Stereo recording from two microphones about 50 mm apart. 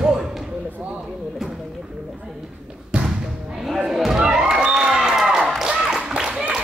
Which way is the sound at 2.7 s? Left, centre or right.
Right.